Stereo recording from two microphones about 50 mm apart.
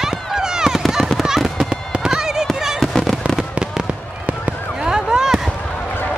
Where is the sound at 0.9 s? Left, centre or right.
Centre.